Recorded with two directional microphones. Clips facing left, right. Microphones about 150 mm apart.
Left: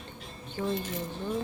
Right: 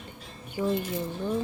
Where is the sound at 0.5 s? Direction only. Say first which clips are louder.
Right 4 dB; 15° right (ahead or behind).